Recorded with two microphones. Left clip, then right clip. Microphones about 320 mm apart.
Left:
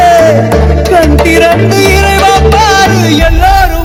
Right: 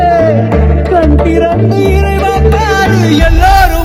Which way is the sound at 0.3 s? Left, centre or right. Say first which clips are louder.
Left 4 dB; left.